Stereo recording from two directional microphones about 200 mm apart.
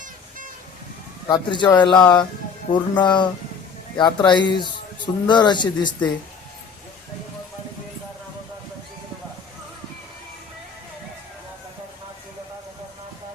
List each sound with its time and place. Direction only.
1.3 s speech: 20° left (ahead or behind)